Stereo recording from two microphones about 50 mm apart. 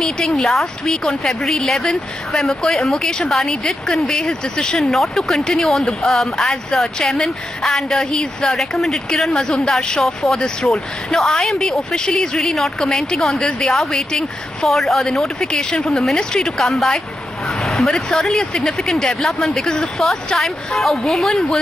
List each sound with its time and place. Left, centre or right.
0.0 s a woman's voice: centre
0.5 s a woman's voice: centre
9.3 s a woman's voice: centre
15.0 s a woman's voice: centre
20.3 s a woman's voice: centre
20.9 s a woman's voice: centre